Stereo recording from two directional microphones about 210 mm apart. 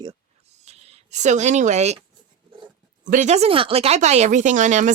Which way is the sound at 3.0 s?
40° right (ahead or behind).